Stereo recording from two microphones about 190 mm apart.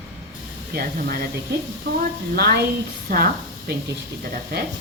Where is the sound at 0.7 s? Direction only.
50° right (ahead or behind).